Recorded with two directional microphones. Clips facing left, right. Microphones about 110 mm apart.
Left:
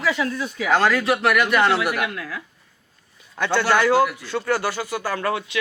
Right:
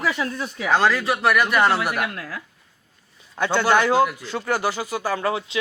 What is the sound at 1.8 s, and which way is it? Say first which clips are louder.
Speech: left 1 dB; 35° right (ahead or behind).